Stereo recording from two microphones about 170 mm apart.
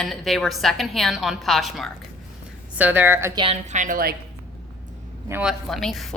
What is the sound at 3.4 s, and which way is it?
Speech, 40° right (ahead or behind).